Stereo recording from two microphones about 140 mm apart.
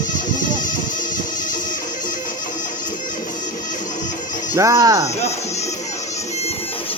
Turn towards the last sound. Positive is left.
turn(degrees=-25)  # may be behind; listen again after turning